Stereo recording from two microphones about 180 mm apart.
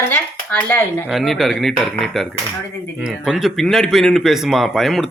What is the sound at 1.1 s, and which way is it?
Speech, centre (ahead or behind).